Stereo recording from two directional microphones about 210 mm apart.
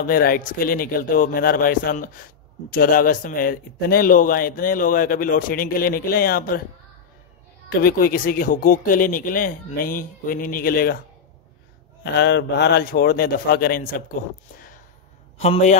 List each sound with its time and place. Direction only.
0.0 s a man's voice: 45° left (ahead or behind)
7.7 s speech: 45° left (ahead or behind)
12.0 s a man's voice: 55° left (ahead or behind)
15.3 s a man's voice: 30° left (ahead or behind)